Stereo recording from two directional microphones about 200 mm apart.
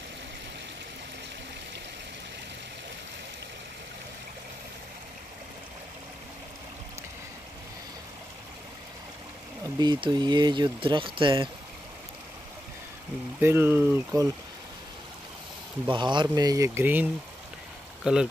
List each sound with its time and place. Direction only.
9.6 s speech: 20° right (ahead or behind)
13.4 s speech: 10° right (ahead or behind)
15.9 s speech: 25° right (ahead or behind); by 18.3 s 5° right (ahead or behind)